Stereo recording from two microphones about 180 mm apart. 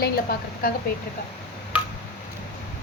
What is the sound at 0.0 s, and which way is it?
Speech, 55° left (ahead or behind).